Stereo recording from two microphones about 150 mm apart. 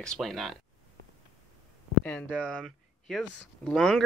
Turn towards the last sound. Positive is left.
turn(degrees=5)  # may be behind; listen again after turning